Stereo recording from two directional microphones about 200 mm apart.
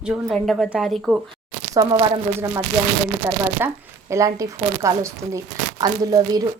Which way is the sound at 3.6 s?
15° right (ahead or behind).